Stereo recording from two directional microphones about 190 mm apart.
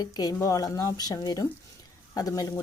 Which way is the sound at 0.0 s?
20° left (ahead or behind).